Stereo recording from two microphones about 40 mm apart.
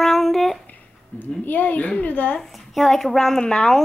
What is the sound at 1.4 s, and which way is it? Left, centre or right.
Speech, left.